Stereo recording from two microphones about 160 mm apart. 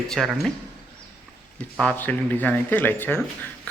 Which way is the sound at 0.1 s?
Centre (ahead or behind).